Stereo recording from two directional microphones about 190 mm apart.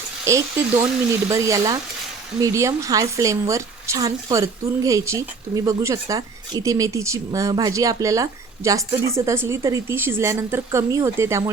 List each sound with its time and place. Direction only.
0.3 s a woman's voice: 15° right (ahead or behind)